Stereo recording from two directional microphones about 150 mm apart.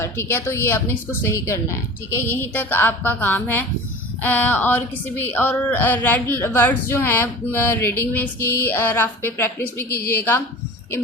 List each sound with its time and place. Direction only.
0.0 s a woman's voice: 15° left (ahead or behind)